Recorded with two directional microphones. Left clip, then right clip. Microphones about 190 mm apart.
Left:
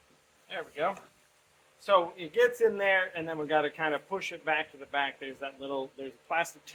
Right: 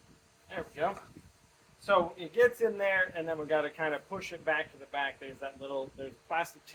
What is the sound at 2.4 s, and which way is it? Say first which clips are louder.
A man's voice: left 1 dB; 45° left (ahead or behind).